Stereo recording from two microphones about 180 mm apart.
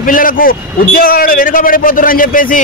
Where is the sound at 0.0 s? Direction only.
50° left (ahead or behind).